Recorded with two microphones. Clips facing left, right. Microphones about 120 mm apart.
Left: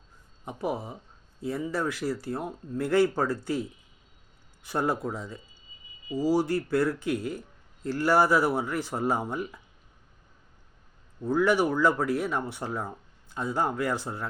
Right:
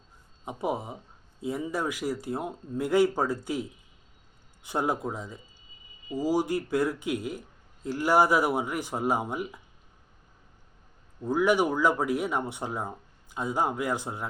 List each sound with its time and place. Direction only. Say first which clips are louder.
0.4 s speech: right 1 dB; 20° right (ahead or behind)
11.3 s speech: even; 15° right (ahead or behind)